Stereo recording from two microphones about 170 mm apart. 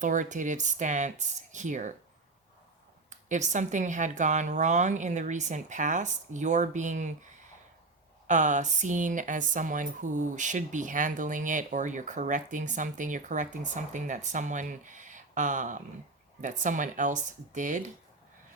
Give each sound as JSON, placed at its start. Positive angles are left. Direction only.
{"t": 0.0, "sound": "speech", "side_deg": -50}
{"t": 3.1, "sound": "speech", "side_deg": -45}
{"t": 8.3, "sound": "speech", "side_deg": -45}